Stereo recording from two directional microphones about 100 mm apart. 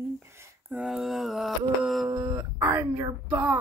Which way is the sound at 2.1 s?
40° right (ahead or behind).